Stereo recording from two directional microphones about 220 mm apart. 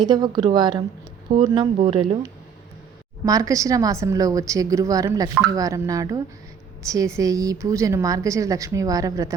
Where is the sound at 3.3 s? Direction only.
15° right (ahead or behind).